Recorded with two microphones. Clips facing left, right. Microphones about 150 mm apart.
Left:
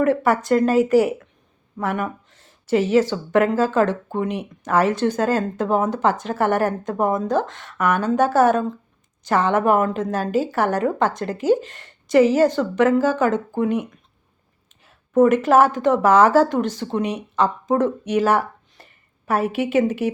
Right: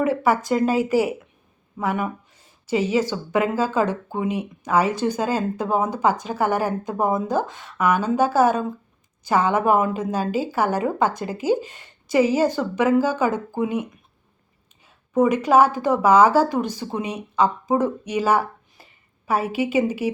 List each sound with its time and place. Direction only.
0.0 s speech: centre (ahead or behind)